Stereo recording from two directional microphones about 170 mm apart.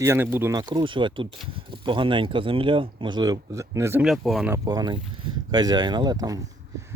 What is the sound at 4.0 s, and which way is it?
Speech, centre (ahead or behind).